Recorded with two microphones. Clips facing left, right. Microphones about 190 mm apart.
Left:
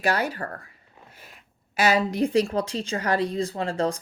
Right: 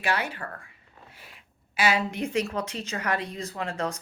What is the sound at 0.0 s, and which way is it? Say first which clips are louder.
A woman's voice: left 4 dB; 40° left (ahead or behind).